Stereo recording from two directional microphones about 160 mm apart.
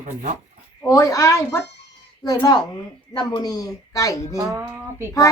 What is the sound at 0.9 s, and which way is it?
Speech, 20° left (ahead or behind).